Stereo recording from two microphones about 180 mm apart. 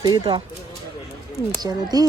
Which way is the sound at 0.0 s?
25° right (ahead or behind).